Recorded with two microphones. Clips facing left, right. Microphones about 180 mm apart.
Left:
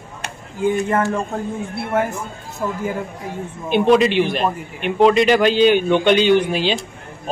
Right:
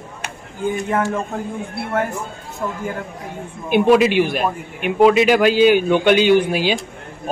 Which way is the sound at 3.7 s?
5° right (ahead or behind).